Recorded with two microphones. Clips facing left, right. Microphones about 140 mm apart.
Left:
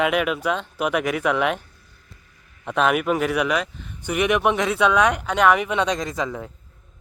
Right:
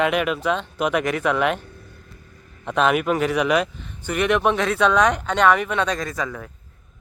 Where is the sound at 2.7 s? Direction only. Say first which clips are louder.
Right 1 dB; 5° left (ahead or behind); by 6.5 s 20° left (ahead or behind).